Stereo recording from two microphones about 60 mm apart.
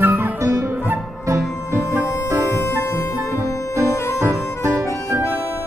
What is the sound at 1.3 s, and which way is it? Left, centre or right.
Music, right.